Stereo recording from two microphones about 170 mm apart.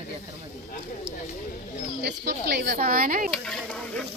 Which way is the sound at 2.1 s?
75° right (ahead or behind).